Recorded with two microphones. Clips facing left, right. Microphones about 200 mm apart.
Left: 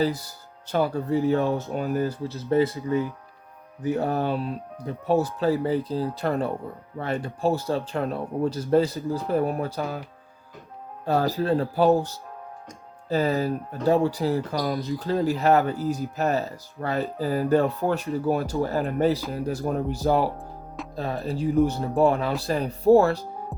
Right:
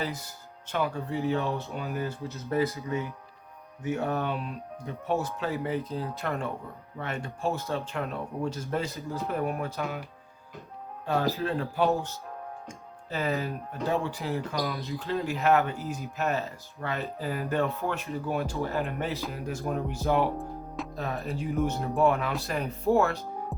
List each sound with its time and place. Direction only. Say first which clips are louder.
0.0 s speech: left 9 dB; 35° left (ahead or behind)
1.7 s speech: left 7 dB; 45° left (ahead or behind)
2.2 s speech: left 5 dB; 30° left (ahead or behind)
3.8 s speech: left 5 dB; 35° left (ahead or behind)
11.0 s speech: left 4 dB; 40° left (ahead or behind)